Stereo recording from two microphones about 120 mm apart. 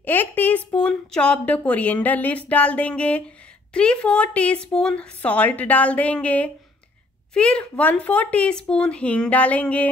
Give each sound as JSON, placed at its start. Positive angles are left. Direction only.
{"t": 0.0, "sound": "speech", "side_deg": 15}